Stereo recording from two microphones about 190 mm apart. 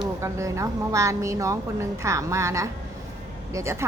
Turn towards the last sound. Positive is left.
turn(degrees=-15)  # may be behind; listen again after turning